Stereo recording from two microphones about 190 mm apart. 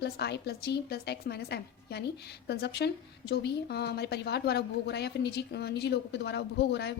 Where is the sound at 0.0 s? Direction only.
60° left (ahead or behind).